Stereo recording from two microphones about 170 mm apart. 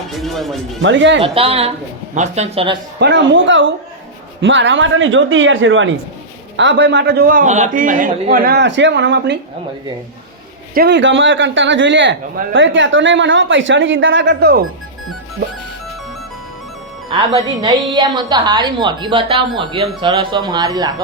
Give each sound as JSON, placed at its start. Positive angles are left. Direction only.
{"t": 0.2, "sound": "speech", "side_deg": 0}
{"t": 0.8, "sound": "speech", "side_deg": -90}
{"t": 1.2, "sound": "speech", "side_deg": -35}
{"t": 3.0, "sound": "a man's voice", "side_deg": -90}
{"t": 8.3, "sound": "speech", "side_deg": -75}
{"t": 10.8, "sound": "speech", "side_deg": -85}
{"t": 17.3, "sound": "a woman's voice", "side_deg": -25}